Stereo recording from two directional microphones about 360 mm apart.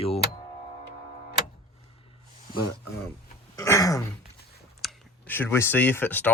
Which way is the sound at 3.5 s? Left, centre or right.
Centre.